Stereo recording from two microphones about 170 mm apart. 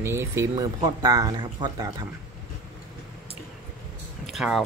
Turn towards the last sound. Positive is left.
turn(degrees=0)  # may be behind; listen again after turning